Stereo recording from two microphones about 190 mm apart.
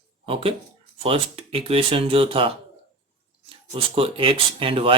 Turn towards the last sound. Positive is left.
turn(degrees=-30)  # may be behind; listen again after turning